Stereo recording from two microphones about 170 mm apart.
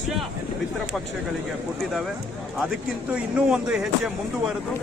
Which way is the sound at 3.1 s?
5° right (ahead or behind).